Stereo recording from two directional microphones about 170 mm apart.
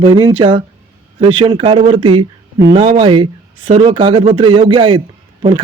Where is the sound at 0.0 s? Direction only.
25° right (ahead or behind).